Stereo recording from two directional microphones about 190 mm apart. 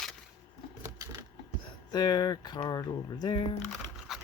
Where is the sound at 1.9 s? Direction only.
20° left (ahead or behind).